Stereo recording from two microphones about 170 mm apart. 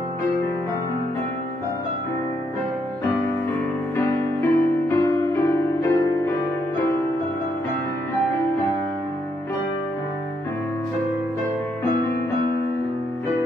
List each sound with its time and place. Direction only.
3.9 s music: 15° left (ahead or behind)